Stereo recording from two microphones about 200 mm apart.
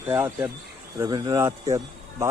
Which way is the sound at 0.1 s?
10° right (ahead or behind).